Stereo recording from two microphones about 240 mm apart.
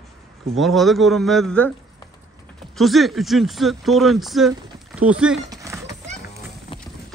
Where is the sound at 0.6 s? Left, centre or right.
Centre.